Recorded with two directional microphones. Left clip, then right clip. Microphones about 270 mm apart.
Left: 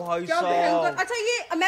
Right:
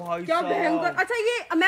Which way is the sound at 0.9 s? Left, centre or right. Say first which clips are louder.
Right 2 dB; right.